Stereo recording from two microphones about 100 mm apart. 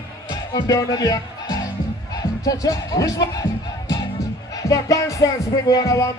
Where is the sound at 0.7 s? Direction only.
35° left (ahead or behind).